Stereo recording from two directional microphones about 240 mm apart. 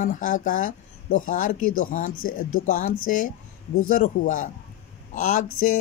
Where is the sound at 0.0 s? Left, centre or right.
Left.